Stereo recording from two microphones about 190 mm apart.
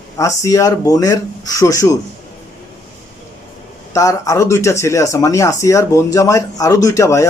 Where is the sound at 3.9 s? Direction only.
15° left (ahead or behind).